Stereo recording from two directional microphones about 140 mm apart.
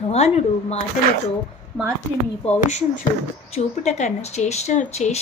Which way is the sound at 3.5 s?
55° left (ahead or behind).